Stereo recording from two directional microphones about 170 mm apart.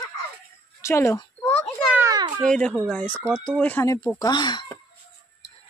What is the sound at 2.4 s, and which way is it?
Speech, 5° left (ahead or behind).